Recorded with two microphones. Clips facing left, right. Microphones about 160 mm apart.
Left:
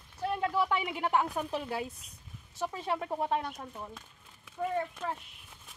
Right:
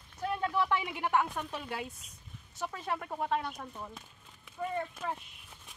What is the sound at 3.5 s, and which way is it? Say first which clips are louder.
Speech: left 1 dB; 5° left (ahead or behind).